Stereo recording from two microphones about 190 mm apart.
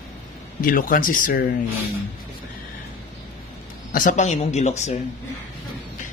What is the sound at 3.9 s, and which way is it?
A man's voice, 40° left (ahead or behind).